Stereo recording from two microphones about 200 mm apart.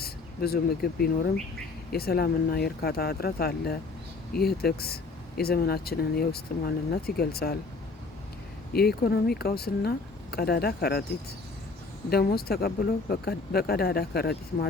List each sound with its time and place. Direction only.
0.0 s speech: 50° left (ahead or behind)
8.7 s speech: 50° left (ahead or behind)
12.1 s speech: 50° left (ahead or behind)